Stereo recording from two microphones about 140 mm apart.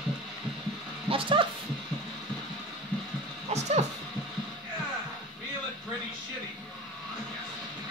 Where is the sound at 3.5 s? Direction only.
55° right (ahead or behind).